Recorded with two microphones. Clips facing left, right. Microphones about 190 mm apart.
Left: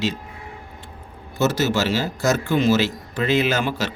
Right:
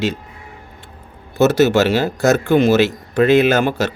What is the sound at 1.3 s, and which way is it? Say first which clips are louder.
Speech: right 8 dB; 60° right (ahead or behind).